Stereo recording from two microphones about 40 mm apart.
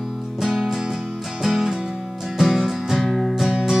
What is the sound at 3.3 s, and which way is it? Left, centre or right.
Music, centre.